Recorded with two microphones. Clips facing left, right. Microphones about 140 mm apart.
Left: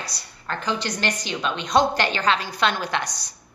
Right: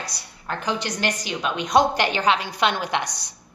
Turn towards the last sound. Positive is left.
turn(degrees=-15)  # may be behind; listen again after turning